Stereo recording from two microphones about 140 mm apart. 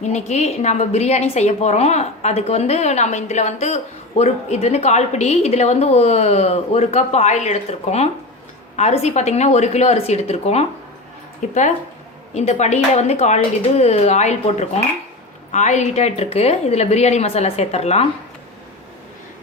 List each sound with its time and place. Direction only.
0.0 s a woman's voice: 55° left (ahead or behind)